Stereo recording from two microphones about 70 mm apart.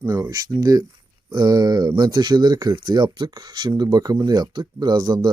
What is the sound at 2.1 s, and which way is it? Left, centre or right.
Speech, right.